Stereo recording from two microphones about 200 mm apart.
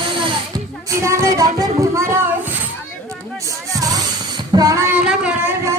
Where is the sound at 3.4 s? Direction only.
15° right (ahead or behind).